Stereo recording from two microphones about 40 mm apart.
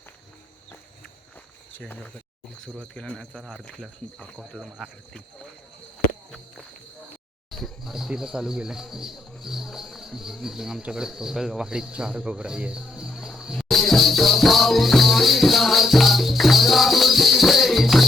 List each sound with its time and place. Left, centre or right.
4.5 s speech: right
7.5 s a sound: centre
7.9 s speech: centre
12.9 s music: centre
13.6 s music: centre